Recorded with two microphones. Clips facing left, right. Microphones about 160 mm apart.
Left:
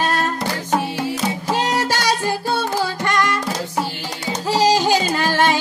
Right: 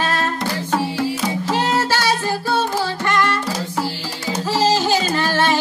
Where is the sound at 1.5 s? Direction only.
15° left (ahead or behind).